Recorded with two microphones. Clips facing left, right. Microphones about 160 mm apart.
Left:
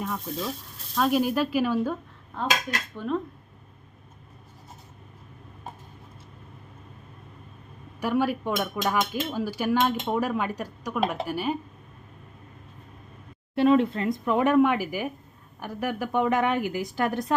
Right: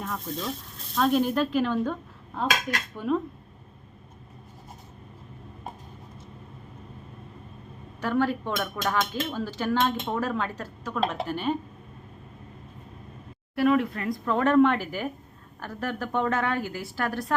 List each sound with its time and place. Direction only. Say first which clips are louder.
0.0 s speech: left 1 dB; centre (ahead or behind)
2.9 s speech: right 3 dB; 5° right (ahead or behind)
8.0 s speech: left 1 dB; 10° left (ahead or behind)
13.6 s speech: left 3 dB; 25° left (ahead or behind)